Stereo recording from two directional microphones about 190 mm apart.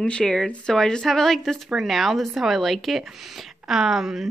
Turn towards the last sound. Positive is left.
turn(degrees=0)  # may be behind; listen again after turning